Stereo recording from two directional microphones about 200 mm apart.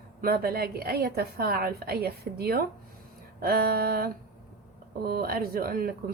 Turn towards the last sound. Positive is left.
turn(degrees=-45)  # may be behind; listen again after turning